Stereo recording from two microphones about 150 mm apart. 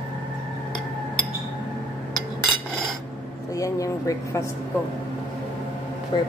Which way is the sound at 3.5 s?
20° left (ahead or behind).